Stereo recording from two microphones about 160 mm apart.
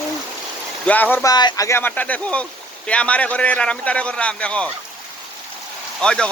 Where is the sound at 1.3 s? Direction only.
25° left (ahead or behind); by 4.7 s 5° left (ahead or behind).